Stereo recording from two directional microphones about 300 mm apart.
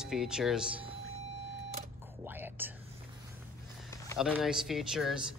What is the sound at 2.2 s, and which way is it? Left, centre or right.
Whispering, centre.